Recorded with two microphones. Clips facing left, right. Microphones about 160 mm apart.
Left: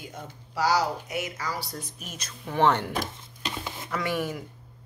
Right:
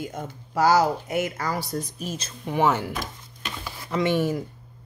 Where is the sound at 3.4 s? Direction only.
20° left (ahead or behind).